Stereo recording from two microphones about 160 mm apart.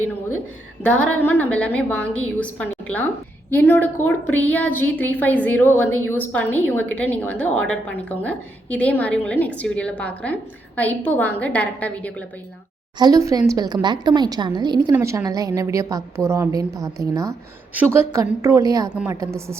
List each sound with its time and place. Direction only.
0.8 s a woman's voice: 10° left (ahead or behind)
13.0 s a woman's voice: 25° right (ahead or behind)